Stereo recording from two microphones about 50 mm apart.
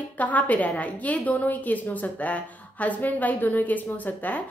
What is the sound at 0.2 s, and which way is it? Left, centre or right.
A woman's voice, left.